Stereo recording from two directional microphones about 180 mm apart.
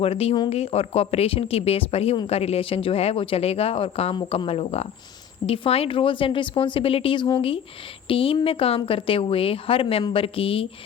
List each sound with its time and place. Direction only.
0.0 s speech: 35° left (ahead or behind)